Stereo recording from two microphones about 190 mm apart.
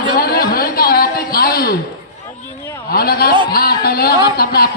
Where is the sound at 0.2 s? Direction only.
55° left (ahead or behind).